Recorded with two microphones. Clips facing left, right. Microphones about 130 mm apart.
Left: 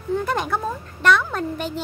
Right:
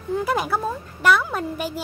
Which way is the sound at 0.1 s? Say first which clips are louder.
Even; 5° right (ahead or behind).